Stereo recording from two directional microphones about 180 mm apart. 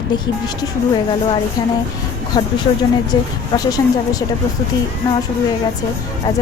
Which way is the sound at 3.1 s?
20° left (ahead or behind).